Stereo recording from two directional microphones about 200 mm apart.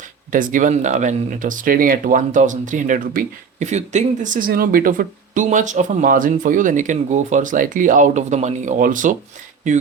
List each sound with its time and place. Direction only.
0.3 s speech: 40° right (ahead or behind)